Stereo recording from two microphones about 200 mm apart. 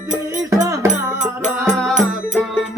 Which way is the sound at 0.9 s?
35° right (ahead or behind).